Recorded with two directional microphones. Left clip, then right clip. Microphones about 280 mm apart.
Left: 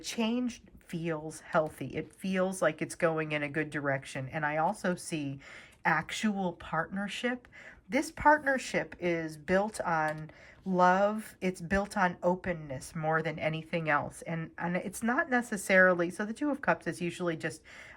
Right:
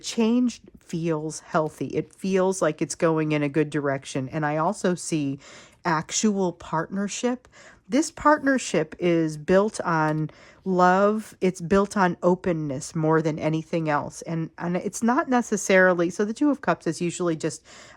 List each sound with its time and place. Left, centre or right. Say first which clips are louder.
0.0 s speech: right 9 dB; centre